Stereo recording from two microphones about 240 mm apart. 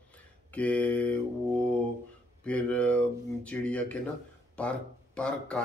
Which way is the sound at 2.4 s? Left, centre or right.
Centre.